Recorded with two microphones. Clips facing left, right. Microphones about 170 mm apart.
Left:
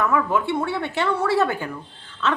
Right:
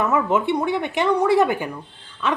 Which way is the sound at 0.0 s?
20° right (ahead or behind).